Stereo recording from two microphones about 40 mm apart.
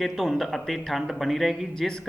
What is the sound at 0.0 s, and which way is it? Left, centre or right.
A man's voice, centre.